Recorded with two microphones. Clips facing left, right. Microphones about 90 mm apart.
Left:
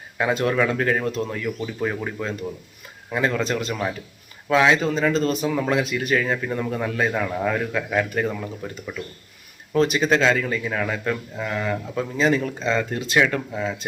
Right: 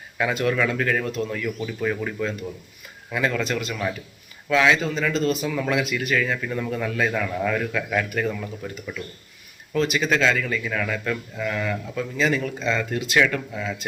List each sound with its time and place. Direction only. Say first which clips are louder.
0.2 s speech: left 2 dB; 30° left (ahead or behind)
1.6 s speech: right 1 dB; 20° left (ahead or behind)
3.1 s a man's voice: left 2 dB; 30° left (ahead or behind)